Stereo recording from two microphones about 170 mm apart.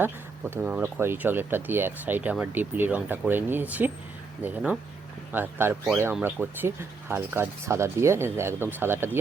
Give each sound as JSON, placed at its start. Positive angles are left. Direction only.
{"t": 0.5, "sound": "speech", "side_deg": -10}